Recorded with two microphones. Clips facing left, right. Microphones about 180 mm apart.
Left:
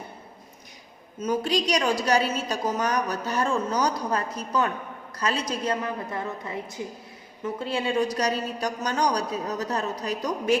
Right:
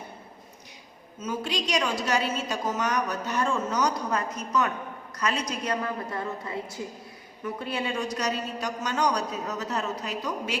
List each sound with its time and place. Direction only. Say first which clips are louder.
1.2 s a woman's voice: left 6 dB; 40° left (ahead or behind)